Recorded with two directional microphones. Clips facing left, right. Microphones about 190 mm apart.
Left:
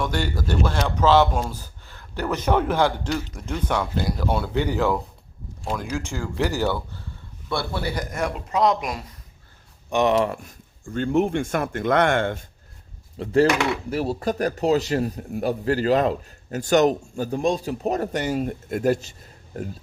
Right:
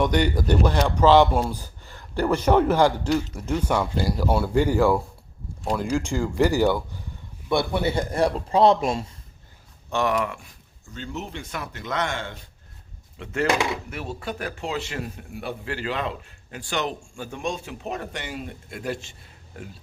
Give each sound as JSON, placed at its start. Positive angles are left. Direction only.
{"t": 0.0, "sound": "speech", "side_deg": -20}
{"t": 9.9, "sound": "speech", "side_deg": 20}
{"t": 10.2, "sound": "speech", "side_deg": 40}
{"t": 13.1, "sound": "a man's voice", "side_deg": 35}